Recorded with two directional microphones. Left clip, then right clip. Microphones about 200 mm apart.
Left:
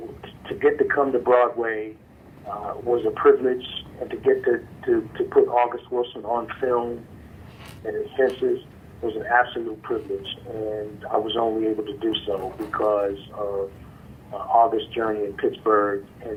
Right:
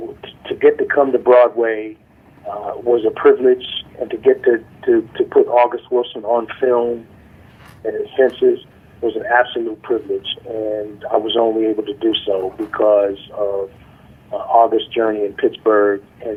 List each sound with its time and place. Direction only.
0.2 s speech: 45° right (ahead or behind)